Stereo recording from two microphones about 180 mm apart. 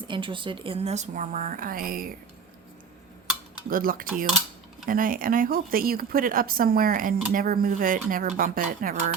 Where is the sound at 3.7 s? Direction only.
50° right (ahead or behind).